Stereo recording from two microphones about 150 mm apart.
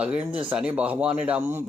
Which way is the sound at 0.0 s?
5° right (ahead or behind).